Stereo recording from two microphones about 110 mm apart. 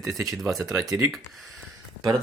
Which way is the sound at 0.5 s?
30° right (ahead or behind).